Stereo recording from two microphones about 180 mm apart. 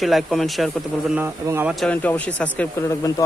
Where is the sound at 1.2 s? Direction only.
15° right (ahead or behind).